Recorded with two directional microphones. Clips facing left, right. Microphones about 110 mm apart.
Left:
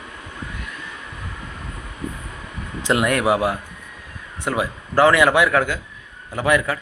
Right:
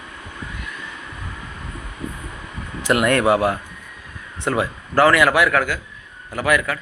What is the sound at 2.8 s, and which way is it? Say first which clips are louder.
A man's voice: right 2 dB; 15° left (ahead or behind).